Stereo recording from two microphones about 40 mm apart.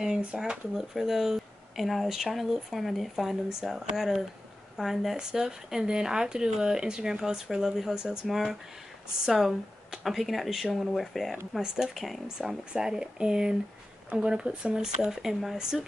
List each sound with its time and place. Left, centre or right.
0.4 s speech: centre
11.5 s speech: centre
11.9 s speech: centre
12.4 s speech: centre